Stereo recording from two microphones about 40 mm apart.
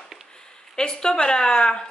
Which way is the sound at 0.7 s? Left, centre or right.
Centre.